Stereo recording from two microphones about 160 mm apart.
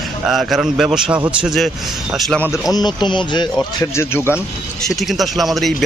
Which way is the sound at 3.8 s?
15° left (ahead or behind).